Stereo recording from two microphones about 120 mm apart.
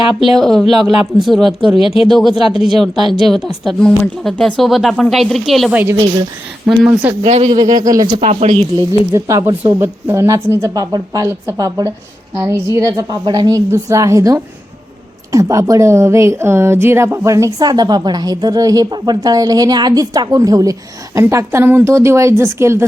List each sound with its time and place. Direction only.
0.2 s speech: centre (ahead or behind)
5.7 s speech: 20° right (ahead or behind)
7.3 s speech: 60° right (ahead or behind)
7.5 s speech: 35° right (ahead or behind)
8.2 s a woman's voice: 70° right (ahead or behind)
9.1 s a woman's voice: 25° right (ahead or behind)